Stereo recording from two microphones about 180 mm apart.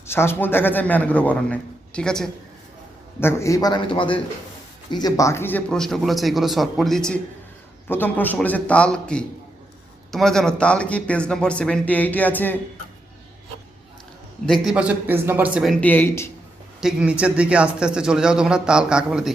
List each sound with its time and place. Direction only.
0.1 s a man's voice: 15° left (ahead or behind)
14.4 s a man's voice: centre (ahead or behind)
16.8 s a man's voice: 5° right (ahead or behind)